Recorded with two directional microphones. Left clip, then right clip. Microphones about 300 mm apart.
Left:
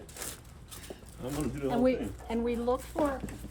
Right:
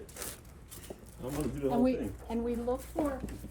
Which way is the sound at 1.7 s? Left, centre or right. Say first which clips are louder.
Left 3 dB; centre.